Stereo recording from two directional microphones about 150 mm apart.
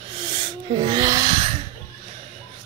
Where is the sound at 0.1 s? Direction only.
35° right (ahead or behind).